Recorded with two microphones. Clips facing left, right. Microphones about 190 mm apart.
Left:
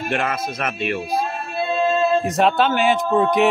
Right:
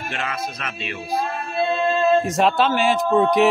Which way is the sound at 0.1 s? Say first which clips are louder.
Left 5 dB; 55° left (ahead or behind).